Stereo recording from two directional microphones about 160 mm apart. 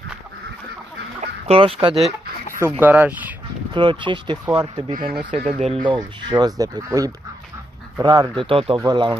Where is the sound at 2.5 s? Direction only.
15° right (ahead or behind).